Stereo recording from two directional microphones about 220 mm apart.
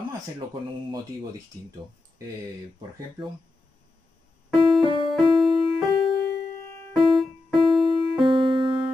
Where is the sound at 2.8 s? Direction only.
20° right (ahead or behind).